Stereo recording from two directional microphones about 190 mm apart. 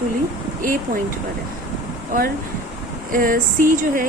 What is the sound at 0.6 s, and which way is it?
Speech, 45° right (ahead or behind).